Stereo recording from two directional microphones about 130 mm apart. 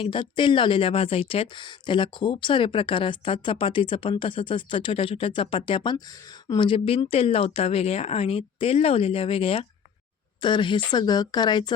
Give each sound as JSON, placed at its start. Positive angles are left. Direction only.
{"t": 0.0, "sound": "speech", "side_deg": 40}